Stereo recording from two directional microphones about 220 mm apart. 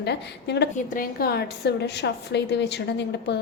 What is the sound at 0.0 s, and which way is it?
Speech, 50° left (ahead or behind).